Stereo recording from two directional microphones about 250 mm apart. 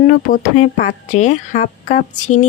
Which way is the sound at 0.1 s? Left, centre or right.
Left.